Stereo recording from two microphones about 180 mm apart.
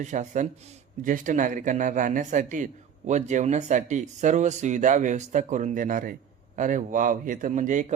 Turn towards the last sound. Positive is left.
turn(degrees=-45)  # may be behind; listen again after turning